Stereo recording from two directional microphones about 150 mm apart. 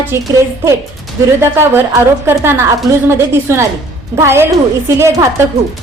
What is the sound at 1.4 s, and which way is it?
A woman's voice, 15° right (ahead or behind).